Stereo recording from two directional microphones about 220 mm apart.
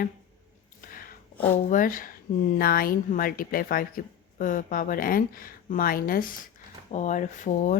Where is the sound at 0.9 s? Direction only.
40° left (ahead or behind).